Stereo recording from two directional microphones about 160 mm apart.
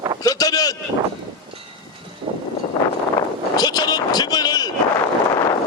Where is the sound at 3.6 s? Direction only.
25° left (ahead or behind).